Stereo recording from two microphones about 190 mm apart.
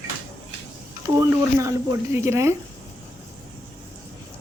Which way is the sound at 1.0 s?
15° right (ahead or behind).